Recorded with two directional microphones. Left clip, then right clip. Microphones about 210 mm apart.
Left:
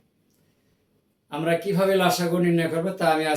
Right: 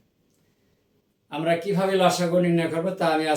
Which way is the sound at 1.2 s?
Centre (ahead or behind).